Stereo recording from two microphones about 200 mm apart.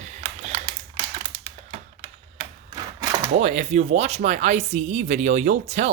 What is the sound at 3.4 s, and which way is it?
Speech, 35° right (ahead or behind).